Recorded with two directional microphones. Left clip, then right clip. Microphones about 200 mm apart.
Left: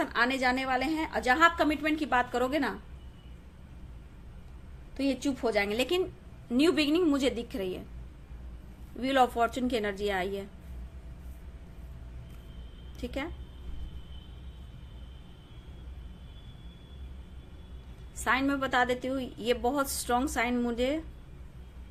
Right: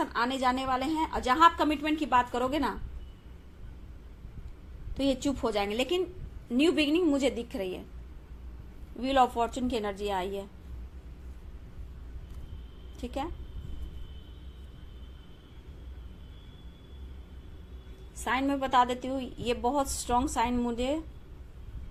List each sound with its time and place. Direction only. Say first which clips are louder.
0.0 s a woman's voice: left 1 dB; 20° left (ahead or behind)
4.9 s a woman's voice: right 2 dB; 10° left (ahead or behind)
9.0 s a woman's voice: even; 20° left (ahead or behind)
13.0 s a woman's voice: right 1 dB; 20° left (ahead or behind)
18.2 s a woman's voice: left 1 dB; 20° left (ahead or behind)